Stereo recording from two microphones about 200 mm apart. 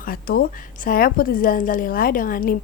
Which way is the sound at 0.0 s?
45° left (ahead or behind).